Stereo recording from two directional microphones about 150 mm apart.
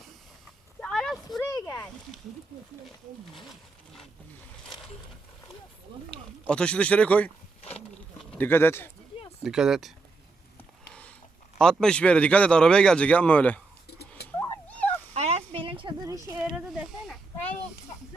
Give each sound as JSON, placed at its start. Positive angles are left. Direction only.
{"t": 0.8, "sound": "a sound", "side_deg": 5}
{"t": 1.5, "sound": "a sound", "side_deg": 25}
{"t": 6.5, "sound": "speech", "side_deg": 5}
{"t": 9.4, "sound": "speech", "side_deg": -5}
{"t": 11.6, "sound": "speech", "side_deg": 5}
{"t": 14.2, "sound": "cat", "side_deg": 90}
{"t": 15.1, "sound": "a sound", "side_deg": -45}
{"t": 16.0, "sound": "speech", "side_deg": -20}
{"t": 16.4, "sound": "speech", "side_deg": -5}